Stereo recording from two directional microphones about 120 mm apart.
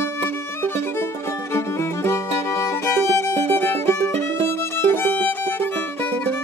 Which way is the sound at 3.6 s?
20° left (ahead or behind).